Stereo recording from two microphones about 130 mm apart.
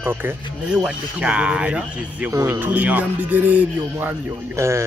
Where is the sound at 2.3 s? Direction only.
25° right (ahead or behind).